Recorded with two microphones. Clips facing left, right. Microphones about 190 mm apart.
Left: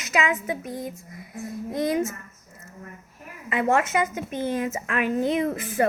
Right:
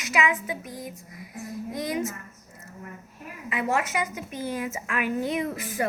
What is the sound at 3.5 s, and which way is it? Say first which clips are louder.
A woman's voice: left 5 dB; 50° left (ahead or behind).